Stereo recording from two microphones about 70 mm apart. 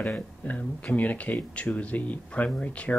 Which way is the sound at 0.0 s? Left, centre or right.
Centre.